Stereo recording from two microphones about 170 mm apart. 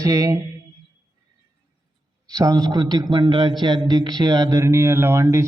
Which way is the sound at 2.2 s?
20° right (ahead or behind).